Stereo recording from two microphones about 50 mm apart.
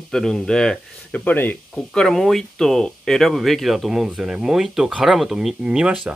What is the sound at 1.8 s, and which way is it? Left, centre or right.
Speech, centre.